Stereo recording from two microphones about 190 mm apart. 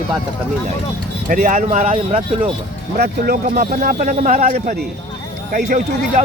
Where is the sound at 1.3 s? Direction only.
40° right (ahead or behind).